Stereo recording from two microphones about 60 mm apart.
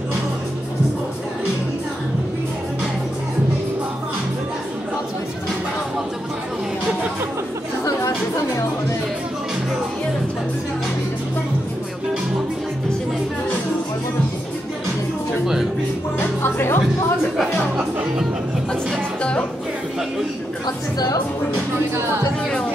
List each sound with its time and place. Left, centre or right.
16.4 s music: left